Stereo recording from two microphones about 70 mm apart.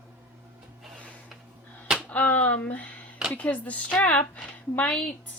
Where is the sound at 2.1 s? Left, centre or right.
Left.